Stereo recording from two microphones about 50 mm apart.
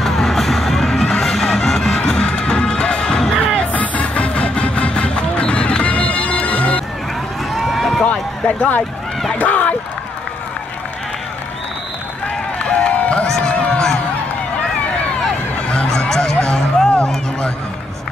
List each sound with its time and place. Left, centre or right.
0.0 s music: centre
3.7 s music: left
7.5 s run: centre
8.0 s a sound: left
9.4 s speech: left
12.6 s run: left
13.6 s a sound: centre
15.9 s music: centre
17.0 s run: centre